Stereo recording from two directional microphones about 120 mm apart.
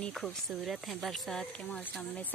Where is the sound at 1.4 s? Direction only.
10° left (ahead or behind).